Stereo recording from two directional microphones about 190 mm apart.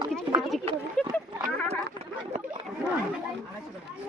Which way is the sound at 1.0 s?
5° left (ahead or behind).